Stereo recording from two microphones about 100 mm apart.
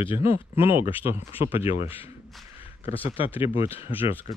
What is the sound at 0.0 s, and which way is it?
Speech, 65° left (ahead or behind).